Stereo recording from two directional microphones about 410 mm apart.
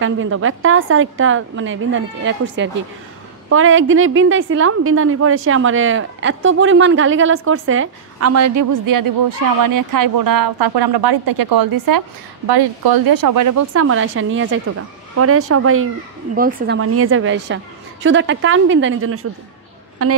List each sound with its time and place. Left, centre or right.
0.0 s a woman's voice: right
12.4 s a woman's voice: right
16.3 s a woman's voice: right